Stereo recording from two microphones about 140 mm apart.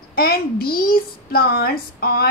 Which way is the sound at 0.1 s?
90° left.